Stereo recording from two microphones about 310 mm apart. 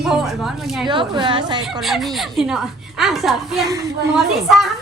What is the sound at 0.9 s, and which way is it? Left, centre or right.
Speech, centre.